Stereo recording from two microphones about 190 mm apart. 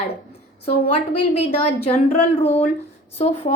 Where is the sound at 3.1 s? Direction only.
30° left (ahead or behind).